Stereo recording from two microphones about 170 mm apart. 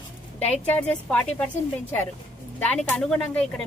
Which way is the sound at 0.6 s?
10° left (ahead or behind).